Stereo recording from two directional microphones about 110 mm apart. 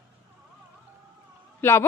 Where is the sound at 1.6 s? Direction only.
25° left (ahead or behind).